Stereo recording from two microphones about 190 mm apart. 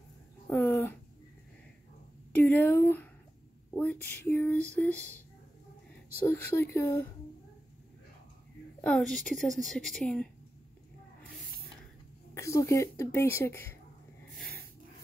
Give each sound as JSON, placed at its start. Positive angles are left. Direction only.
{"t": 0.5, "sound": "a sound", "side_deg": 10}
{"t": 2.3, "sound": "speech", "side_deg": 10}
{"t": 3.7, "sound": "female singing", "side_deg": 10}
{"t": 6.2, "sound": "speech", "side_deg": 10}
{"t": 8.8, "sound": "a woman's voice", "side_deg": 5}
{"t": 12.4, "sound": "speech", "side_deg": 15}